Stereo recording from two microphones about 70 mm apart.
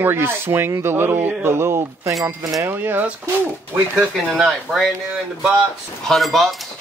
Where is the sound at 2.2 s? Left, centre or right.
Right.